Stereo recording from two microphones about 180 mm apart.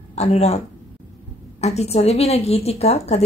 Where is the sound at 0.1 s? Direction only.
35° left (ahead or behind).